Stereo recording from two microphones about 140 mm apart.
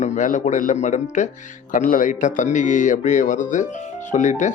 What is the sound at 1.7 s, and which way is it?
Speech, 75° left (ahead or behind).